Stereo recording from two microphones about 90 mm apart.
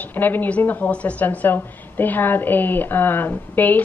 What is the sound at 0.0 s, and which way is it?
A woman's voice, 20° left (ahead or behind).